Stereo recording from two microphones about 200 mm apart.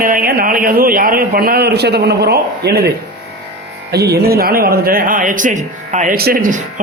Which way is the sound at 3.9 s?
55° right (ahead or behind).